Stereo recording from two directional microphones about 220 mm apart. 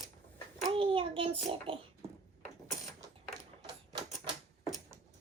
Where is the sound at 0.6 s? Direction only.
25° right (ahead or behind).